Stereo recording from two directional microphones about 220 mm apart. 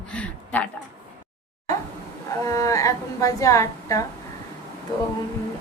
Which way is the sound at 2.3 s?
15° left (ahead or behind).